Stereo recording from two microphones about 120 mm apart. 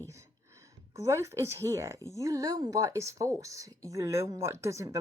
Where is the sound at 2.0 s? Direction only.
30° left (ahead or behind).